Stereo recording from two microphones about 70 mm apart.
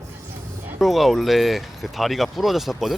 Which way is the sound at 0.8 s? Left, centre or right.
Centre.